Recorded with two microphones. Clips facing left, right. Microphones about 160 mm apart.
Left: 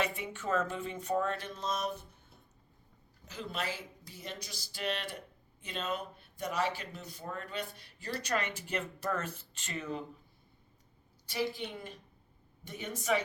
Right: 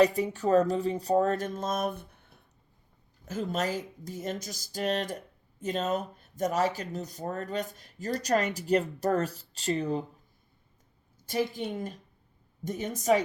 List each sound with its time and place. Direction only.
0.0 s speech: 40° right (ahead or behind); by 2.4 s 60° right (ahead or behind)
3.2 s speech: 45° right (ahead or behind)
11.3 s speech: 45° right (ahead or behind)